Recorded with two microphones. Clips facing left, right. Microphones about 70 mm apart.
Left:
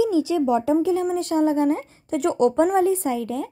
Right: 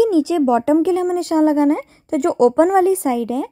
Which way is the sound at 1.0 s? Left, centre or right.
Right.